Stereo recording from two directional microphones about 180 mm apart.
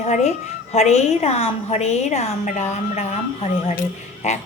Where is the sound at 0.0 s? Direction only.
40° left (ahead or behind).